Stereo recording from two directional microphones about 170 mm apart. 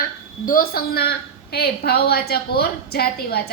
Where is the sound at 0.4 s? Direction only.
60° left (ahead or behind).